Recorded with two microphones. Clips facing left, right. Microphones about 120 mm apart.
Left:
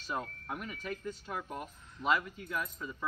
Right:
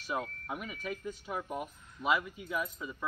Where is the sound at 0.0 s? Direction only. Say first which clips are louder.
Right 2 dB; 10° right (ahead or behind).